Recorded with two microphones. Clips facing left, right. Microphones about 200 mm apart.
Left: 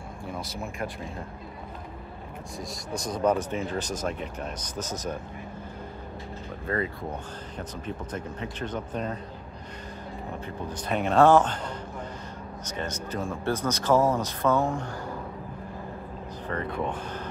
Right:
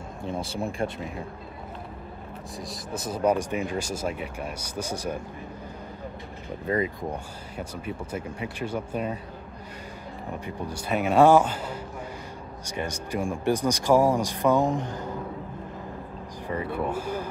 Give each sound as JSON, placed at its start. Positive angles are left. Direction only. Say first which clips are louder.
{"t": 0.2, "sound": "speech", "louder": "right 6 dB", "side_deg": -25}
{"t": 2.6, "sound": "speech", "louder": "even", "side_deg": 0}
{"t": 6.7, "sound": "speech", "louder": "right 3 dB", "side_deg": -15}
{"t": 10.4, "sound": "speech", "louder": "right 1 dB", "side_deg": -10}
{"t": 16.4, "sound": "speech", "louder": "right 2 dB", "side_deg": -10}